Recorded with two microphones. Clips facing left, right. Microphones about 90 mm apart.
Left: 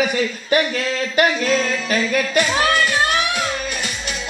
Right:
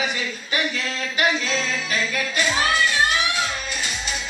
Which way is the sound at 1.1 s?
55° left (ahead or behind).